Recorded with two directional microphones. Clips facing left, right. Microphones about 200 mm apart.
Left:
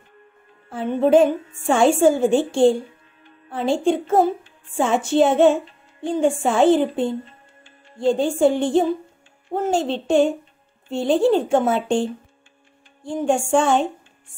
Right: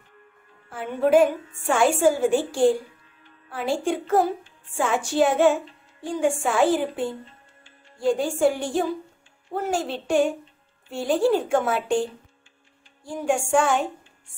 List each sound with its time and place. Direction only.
0.7 s a woman's voice: 25° left (ahead or behind)